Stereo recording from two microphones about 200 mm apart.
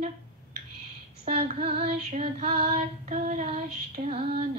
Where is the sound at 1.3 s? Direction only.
30° right (ahead or behind).